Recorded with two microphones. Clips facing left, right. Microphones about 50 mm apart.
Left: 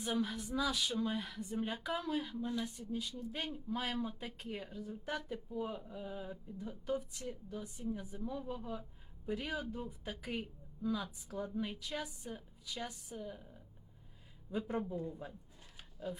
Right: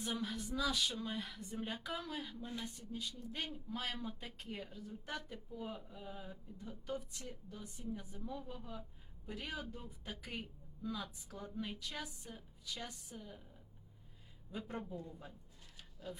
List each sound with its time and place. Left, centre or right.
0.0 s speech: centre
14.7 s speech: centre
14.9 s a woman's voice: left